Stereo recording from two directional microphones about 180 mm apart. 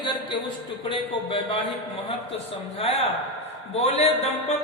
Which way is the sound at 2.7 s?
35° left (ahead or behind).